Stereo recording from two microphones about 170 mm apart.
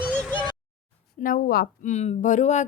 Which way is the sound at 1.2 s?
60° left (ahead or behind).